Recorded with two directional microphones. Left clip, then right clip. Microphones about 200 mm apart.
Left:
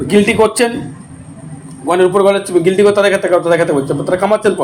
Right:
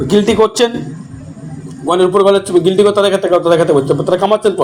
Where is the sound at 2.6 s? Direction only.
10° left (ahead or behind).